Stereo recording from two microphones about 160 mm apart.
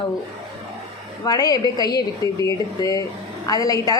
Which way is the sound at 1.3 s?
25° left (ahead or behind).